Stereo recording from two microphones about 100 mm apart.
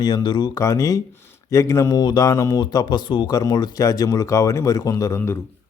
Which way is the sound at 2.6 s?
45° left (ahead or behind).